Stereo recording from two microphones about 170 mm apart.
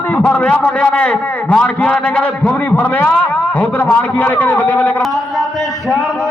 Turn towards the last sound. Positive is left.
turn(degrees=10)  # may be behind; listen again after turning